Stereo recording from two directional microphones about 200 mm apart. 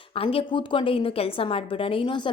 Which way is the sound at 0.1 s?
25° left (ahead or behind).